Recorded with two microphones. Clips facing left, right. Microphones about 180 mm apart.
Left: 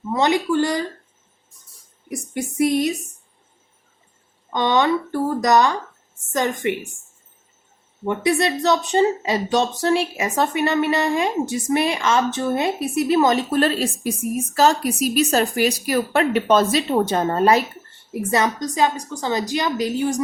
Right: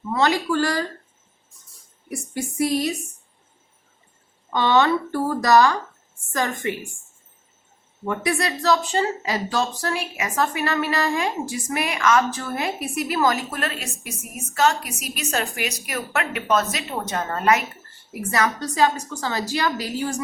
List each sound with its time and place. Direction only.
0.1 s a woman's voice: 20° left (ahead or behind)
2.0 s a woman's voice: 20° left (ahead or behind)
4.5 s a woman's voice: 15° left (ahead or behind)
8.0 s a woman's voice: 25° left (ahead or behind)